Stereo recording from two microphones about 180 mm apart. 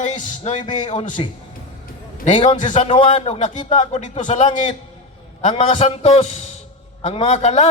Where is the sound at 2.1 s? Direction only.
40° left (ahead or behind).